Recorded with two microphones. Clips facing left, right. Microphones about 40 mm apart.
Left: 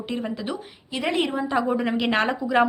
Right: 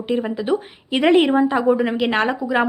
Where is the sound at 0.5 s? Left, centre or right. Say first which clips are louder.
Right 11 dB; right.